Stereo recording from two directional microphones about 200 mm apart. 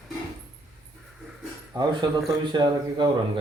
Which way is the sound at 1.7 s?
20° right (ahead or behind).